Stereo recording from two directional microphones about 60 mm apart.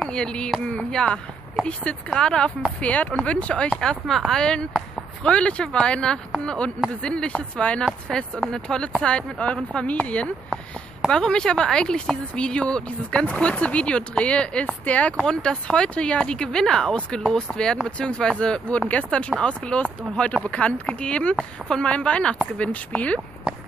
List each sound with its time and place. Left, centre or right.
0.1 s a sound: centre
0.9 s speech: centre
2.8 s speech: left
7.8 s speech: centre